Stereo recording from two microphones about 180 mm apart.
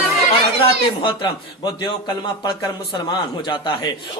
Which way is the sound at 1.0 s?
25° left (ahead or behind).